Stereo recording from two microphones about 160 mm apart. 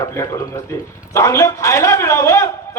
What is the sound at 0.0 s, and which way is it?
A man's voice, 20° left (ahead or behind).